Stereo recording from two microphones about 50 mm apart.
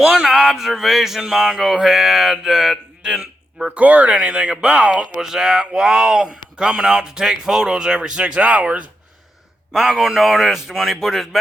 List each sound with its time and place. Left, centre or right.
0.0 s speech: centre
3.8 s speech: right
4.2 s speech: centre
5.2 s speech: centre; by 8.9 s right
9.7 s a man's voice: centre